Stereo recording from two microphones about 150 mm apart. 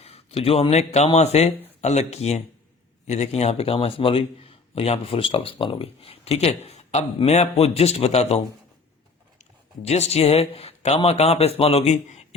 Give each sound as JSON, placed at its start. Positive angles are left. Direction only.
{"t": 0.0, "sound": "a man's voice", "side_deg": 40}
{"t": 9.4, "sound": "speech", "side_deg": 45}